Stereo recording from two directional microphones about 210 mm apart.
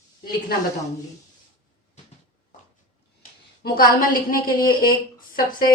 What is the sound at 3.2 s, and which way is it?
A woman's voice, 45° left (ahead or behind).